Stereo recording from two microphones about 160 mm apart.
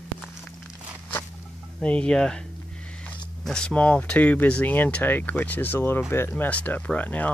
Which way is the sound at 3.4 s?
5° left (ahead or behind).